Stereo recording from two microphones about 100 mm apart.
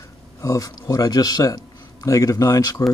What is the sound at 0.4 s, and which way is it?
Speech, 35° left (ahead or behind).